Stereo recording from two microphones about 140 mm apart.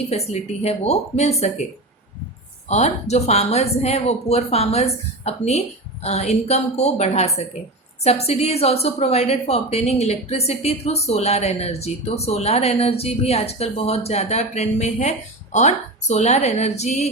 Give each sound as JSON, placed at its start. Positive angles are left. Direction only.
{"t": 0.1, "sound": "a woman's voice", "side_deg": 50}
{"t": 2.6, "sound": "a woman's voice", "side_deg": 55}